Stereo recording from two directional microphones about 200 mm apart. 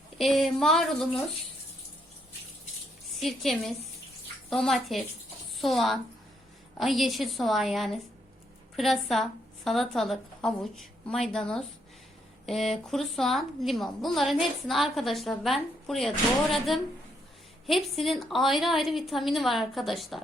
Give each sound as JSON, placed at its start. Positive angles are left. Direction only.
{"t": 0.2, "sound": "a woman's voice", "side_deg": 0}
{"t": 3.2, "sound": "a woman's voice", "side_deg": 0}